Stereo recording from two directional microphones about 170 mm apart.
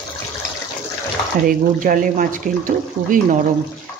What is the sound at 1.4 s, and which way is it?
Speech, 55° right (ahead or behind).